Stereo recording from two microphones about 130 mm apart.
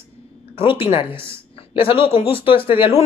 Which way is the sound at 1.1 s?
20° right (ahead or behind).